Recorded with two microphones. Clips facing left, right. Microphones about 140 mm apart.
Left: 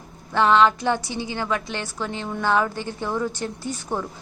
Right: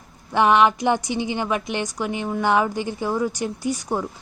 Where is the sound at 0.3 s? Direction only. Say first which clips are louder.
Right 1 dB; 15° right (ahead or behind).